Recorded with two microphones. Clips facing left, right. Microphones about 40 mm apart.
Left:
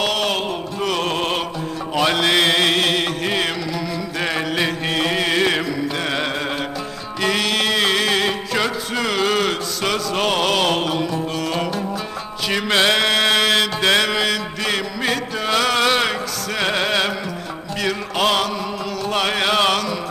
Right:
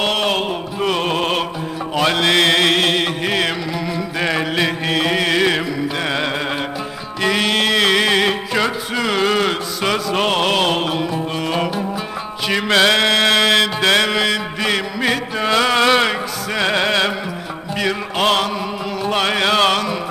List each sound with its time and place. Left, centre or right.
0.0 s music: centre
4.2 s mantra: centre
6.1 s music: centre
12.9 s chant: right
13.4 s mantra: right
13.9 s mantra: centre
16.6 s music: centre